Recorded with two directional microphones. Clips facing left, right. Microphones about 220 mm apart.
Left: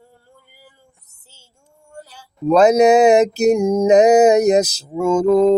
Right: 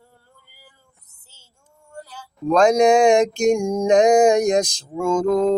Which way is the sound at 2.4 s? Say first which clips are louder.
Left 3 dB; 5° left (ahead or behind).